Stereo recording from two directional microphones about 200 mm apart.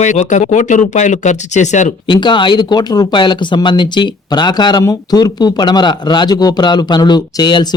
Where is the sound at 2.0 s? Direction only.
25° left (ahead or behind).